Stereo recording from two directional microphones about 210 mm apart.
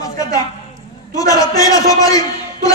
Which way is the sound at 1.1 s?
15° left (ahead or behind).